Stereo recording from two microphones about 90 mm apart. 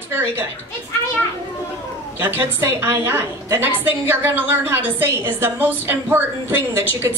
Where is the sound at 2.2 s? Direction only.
25° right (ahead or behind).